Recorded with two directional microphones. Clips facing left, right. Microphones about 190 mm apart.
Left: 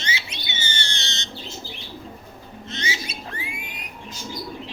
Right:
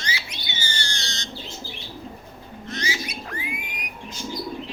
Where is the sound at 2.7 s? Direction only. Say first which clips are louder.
Right 2 dB; 25° left (ahead or behind).